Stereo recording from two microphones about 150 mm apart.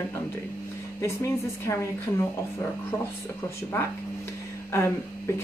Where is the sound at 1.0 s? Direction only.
20° left (ahead or behind).